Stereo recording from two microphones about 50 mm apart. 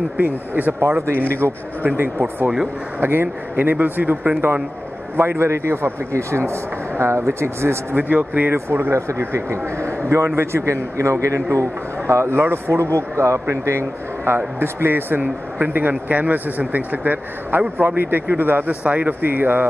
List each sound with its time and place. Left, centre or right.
0.2 s speech: right
0.7 s a man's voice: right
1.4 s speech: right
2.0 s speech: right
5.1 s a man's voice: right
7.9 s speech: right
8.5 s a man's voice: right
12.1 s a man's voice: right
12.4 s speech: right
12.7 s a man's voice: right
18.7 s speech: right
19.2 s speech: right